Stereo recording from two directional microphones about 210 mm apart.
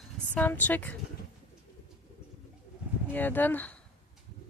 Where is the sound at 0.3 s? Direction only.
10° left (ahead or behind).